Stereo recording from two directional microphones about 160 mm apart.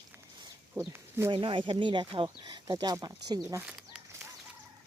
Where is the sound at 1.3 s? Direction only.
30° right (ahead or behind).